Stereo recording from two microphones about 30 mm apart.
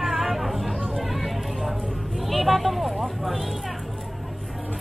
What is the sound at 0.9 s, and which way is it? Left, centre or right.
Run, centre.